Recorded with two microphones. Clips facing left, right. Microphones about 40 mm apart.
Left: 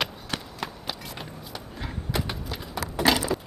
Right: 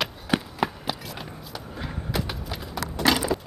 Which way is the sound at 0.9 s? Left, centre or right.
Centre.